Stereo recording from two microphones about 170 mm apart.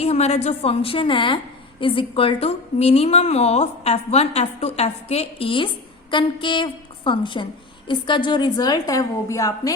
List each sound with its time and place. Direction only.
0.0 s a woman's voice: 40° left (ahead or behind); by 9.7 s 20° left (ahead or behind)